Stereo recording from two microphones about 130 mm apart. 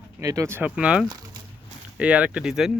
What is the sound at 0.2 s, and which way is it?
A man's voice, 25° right (ahead or behind).